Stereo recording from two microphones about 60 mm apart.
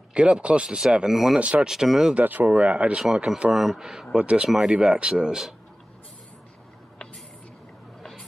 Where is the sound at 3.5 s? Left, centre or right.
Centre.